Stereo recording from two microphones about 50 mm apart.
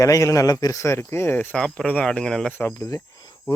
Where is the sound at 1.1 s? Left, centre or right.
Left.